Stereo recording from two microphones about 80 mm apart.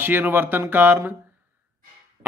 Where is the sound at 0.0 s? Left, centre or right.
Right.